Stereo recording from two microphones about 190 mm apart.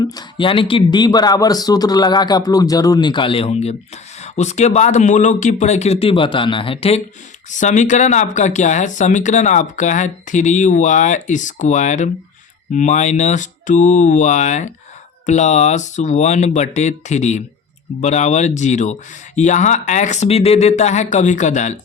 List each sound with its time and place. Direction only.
0.0 s speech: 20° left (ahead or behind); by 21.8 s 40° left (ahead or behind)